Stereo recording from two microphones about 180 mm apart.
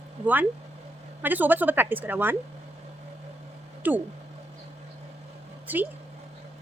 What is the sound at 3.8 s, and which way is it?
Speech, 10° right (ahead or behind).